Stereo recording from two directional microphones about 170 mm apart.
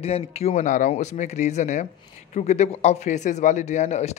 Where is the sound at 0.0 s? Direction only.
35° left (ahead or behind).